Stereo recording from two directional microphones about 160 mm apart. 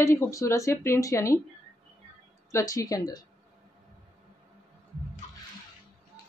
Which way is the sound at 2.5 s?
20° left (ahead or behind).